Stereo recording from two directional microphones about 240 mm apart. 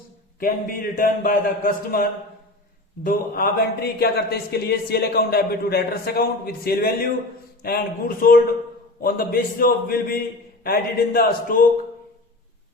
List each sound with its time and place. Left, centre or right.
0.3 s speech: left